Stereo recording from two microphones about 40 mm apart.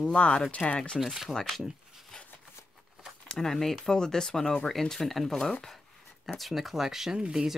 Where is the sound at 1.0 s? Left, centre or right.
Centre.